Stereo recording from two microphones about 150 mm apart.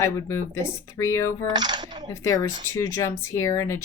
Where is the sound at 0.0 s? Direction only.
20° left (ahead or behind).